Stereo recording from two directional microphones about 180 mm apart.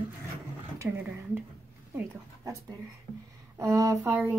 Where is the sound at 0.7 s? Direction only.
10° right (ahead or behind).